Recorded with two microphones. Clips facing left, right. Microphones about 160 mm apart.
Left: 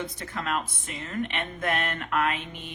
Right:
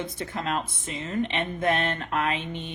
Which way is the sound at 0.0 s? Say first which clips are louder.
Right 2 dB; 25° right (ahead or behind).